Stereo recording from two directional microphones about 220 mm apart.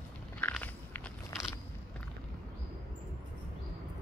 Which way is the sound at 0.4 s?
10° left (ahead or behind).